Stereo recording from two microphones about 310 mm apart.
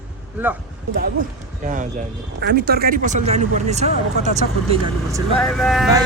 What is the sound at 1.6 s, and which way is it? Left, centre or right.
Speech, right.